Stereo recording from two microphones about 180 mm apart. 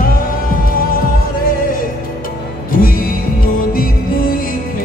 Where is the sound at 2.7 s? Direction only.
50° left (ahead or behind).